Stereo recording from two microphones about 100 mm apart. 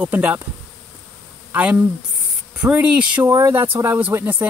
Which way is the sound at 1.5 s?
15° right (ahead or behind).